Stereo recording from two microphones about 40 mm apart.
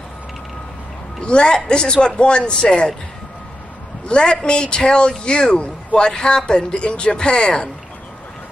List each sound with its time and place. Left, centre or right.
1.2 s speech: left
4.1 s speech: left